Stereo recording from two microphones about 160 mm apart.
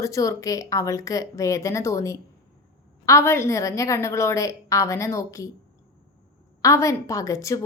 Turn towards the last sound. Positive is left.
turn(degrees=20)  # may be behind; listen again after turning